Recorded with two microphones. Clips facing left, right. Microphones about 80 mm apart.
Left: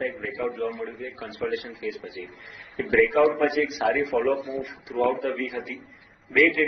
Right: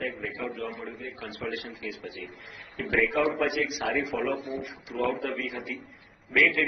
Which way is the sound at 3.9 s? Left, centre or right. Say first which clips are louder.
Left 6 dB; centre.